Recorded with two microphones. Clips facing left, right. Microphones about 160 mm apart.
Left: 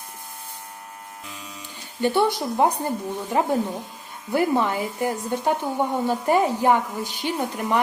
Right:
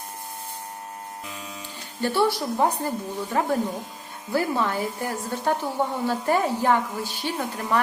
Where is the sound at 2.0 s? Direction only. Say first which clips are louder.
Left 2 dB; 20° left (ahead or behind).